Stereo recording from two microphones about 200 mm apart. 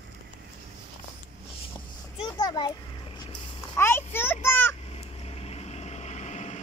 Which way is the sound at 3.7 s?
10° left (ahead or behind).